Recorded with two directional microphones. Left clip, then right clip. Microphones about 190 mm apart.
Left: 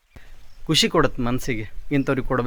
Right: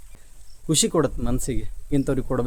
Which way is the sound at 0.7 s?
Centre (ahead or behind).